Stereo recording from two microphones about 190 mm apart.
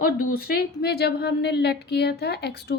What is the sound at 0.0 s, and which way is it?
A woman's voice, 50° left (ahead or behind).